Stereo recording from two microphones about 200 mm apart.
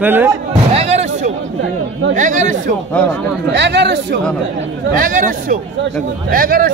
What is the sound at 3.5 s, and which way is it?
Speech, 60° right (ahead or behind).